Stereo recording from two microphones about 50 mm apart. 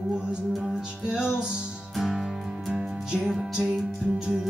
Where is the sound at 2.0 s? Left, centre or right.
Centre.